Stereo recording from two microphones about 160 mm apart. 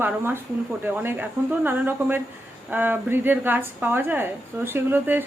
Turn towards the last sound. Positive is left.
turn(degrees=-15)  # may be behind; listen again after turning